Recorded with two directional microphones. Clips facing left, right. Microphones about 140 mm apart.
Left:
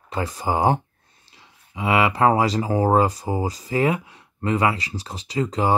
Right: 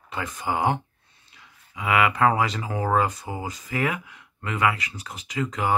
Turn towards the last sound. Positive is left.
turn(degrees=30)  # may be behind; listen again after turning